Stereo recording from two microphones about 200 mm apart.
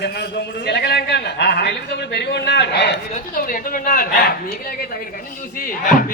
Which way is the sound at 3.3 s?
45° left (ahead or behind).